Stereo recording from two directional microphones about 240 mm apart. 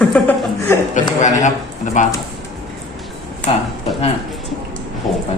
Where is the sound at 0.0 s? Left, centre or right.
Centre.